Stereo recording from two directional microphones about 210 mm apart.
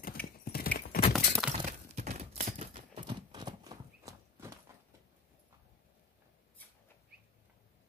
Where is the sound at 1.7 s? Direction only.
35° right (ahead or behind); by 4.5 s 15° right (ahead or behind).